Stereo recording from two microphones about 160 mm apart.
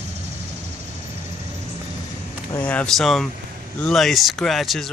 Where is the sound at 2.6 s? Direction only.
10° left (ahead or behind).